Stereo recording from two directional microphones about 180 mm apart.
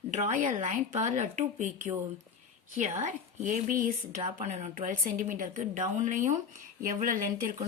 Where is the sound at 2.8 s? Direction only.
40° right (ahead or behind).